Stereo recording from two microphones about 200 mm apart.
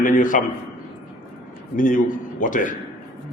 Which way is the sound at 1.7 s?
40° left (ahead or behind).